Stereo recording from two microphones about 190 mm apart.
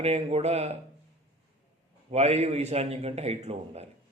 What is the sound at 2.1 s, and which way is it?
Speech, 35° right (ahead or behind).